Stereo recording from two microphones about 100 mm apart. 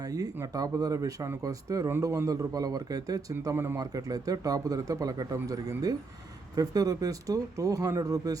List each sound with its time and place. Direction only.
0.0 s speech: 40° right (ahead or behind)
3.5 s speech: 25° right (ahead or behind)
3.8 s speech: 40° right (ahead or behind)